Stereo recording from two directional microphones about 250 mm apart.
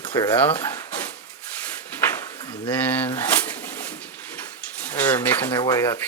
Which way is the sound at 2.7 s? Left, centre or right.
Centre.